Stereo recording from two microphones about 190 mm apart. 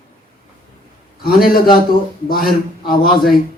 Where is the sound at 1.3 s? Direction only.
50° left (ahead or behind).